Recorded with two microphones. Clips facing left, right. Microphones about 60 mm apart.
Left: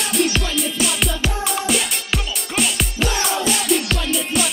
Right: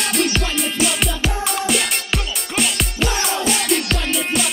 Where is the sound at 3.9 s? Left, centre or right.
Right.